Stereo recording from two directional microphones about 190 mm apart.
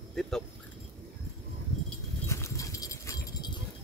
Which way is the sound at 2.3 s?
15° left (ahead or behind).